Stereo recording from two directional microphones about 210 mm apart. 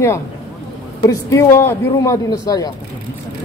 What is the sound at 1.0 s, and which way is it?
Speech, 15° left (ahead or behind).